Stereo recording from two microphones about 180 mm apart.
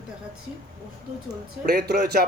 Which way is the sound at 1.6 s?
60° right (ahead or behind).